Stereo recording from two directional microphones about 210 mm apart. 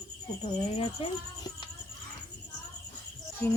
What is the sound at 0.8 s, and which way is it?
Speech, 30° left (ahead or behind).